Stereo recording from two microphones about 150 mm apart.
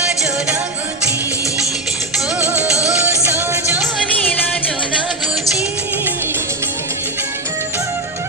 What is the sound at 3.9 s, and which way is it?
Music, 5° left (ahead or behind).